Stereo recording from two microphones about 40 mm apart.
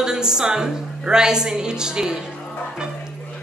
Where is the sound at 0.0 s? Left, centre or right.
Centre.